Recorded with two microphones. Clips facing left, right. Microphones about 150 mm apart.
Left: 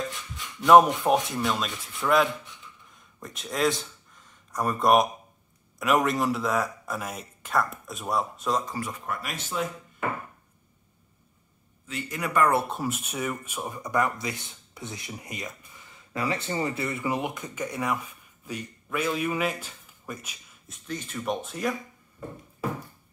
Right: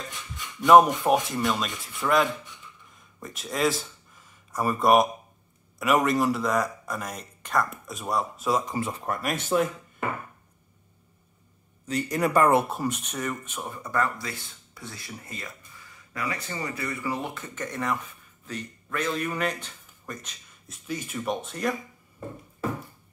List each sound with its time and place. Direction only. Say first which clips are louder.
0.6 s speech: even; centre (ahead or behind)
8.6 s speech: right 3 dB; 25° right (ahead or behind)
9.0 s speech: right 5 dB; 40° right (ahead or behind)
11.8 s a man's voice: right 7 dB; 40° right (ahead or behind)
12.6 s speech: right 1 dB; centre (ahead or behind)